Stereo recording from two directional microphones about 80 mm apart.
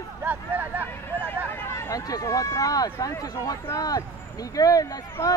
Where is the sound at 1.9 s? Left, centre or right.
Left.